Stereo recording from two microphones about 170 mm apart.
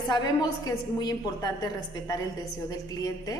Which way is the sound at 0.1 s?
25° left (ahead or behind).